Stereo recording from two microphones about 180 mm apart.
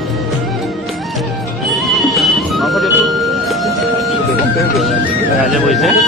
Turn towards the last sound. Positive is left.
turn(degrees=0)  # may be behind; listen again after turning